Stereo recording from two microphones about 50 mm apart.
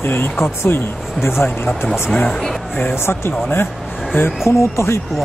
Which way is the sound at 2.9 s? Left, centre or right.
Left.